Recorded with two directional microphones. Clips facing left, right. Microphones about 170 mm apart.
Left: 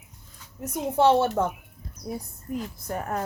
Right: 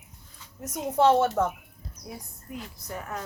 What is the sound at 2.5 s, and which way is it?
Speech, 40° left (ahead or behind).